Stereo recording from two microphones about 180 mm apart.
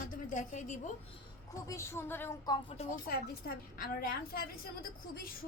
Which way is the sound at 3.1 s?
55° left (ahead or behind).